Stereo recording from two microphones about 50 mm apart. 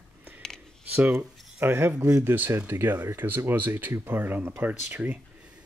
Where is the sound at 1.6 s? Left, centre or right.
Right.